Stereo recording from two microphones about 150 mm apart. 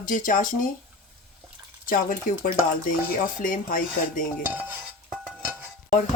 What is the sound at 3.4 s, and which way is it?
Speech, 65° left (ahead or behind).